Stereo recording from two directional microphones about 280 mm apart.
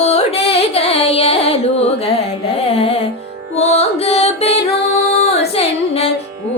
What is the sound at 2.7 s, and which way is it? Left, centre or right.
Music, left.